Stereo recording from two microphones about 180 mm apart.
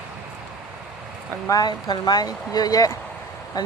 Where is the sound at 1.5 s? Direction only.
20° left (ahead or behind).